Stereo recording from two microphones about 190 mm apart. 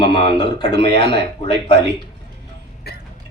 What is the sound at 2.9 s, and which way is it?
Vehicle, 60° left (ahead or behind).